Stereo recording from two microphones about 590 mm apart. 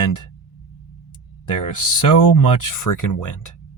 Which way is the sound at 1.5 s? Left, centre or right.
Left.